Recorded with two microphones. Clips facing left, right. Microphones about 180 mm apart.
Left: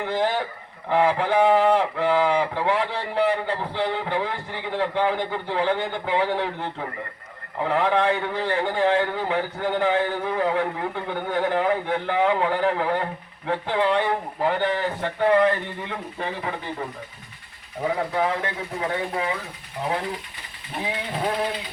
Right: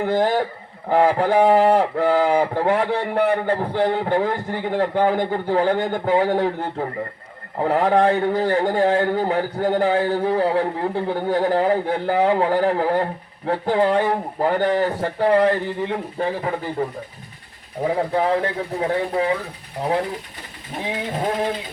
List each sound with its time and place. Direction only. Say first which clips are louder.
0.0 s speech: right 5 dB; 45° right (ahead or behind)
17.8 s speech: right 4 dB; 35° right (ahead or behind)